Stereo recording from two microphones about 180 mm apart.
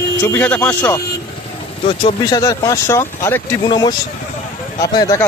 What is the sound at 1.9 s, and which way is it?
Speech, 30° left (ahead or behind).